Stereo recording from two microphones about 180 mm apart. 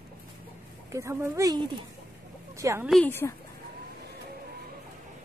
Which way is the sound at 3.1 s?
10° left (ahead or behind).